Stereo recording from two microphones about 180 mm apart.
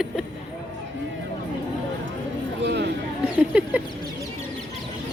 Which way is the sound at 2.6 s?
70° right (ahead or behind).